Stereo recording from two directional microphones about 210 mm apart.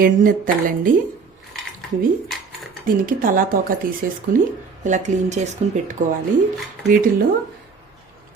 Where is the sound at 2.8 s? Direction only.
40° right (ahead or behind).